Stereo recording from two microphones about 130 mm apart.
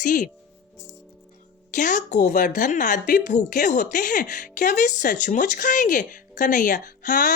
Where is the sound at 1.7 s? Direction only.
70° left (ahead or behind).